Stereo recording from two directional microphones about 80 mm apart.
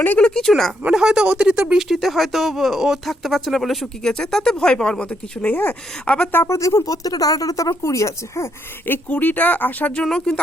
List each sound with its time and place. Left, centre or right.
0.0 s speech: left
0.3 s speech: centre
0.9 s speech: centre; by 6.4 s left
6.4 s speech: left
8.9 s speech: left